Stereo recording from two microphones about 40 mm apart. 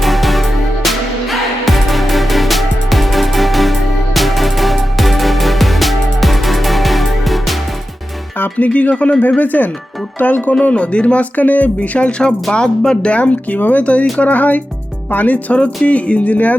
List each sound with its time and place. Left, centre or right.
0.0 s music: centre
8.4 s speech: left
9.4 s speech: left
10.6 s speech: left
12.5 s speech: centre
13.1 s speech: left
15.5 s speech: left